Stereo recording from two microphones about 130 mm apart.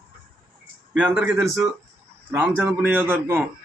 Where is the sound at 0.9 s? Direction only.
10° right (ahead or behind).